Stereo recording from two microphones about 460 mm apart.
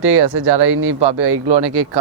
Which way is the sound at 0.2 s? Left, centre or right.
Right.